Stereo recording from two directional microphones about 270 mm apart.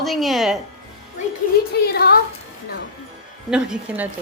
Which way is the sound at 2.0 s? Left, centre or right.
Left.